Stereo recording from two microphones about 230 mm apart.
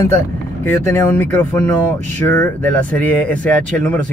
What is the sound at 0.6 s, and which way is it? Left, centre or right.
Speech, centre.